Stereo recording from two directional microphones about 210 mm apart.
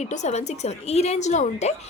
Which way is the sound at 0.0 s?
35° left (ahead or behind).